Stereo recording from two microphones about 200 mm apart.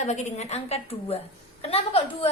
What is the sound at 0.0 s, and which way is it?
A woman's voice, 35° left (ahead or behind).